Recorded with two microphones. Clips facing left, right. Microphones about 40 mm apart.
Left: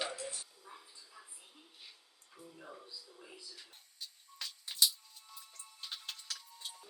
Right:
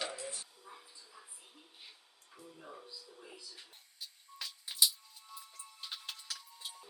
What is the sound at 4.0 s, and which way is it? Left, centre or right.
Music, centre.